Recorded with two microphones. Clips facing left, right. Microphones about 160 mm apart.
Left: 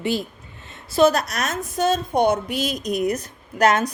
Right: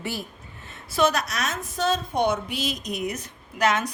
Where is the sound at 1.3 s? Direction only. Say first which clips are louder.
Left 4 dB; 50° left (ahead or behind).